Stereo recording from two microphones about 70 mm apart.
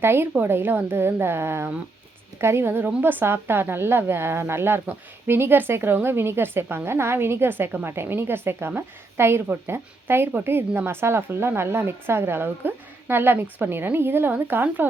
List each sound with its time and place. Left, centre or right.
0.0 s a woman's voice: right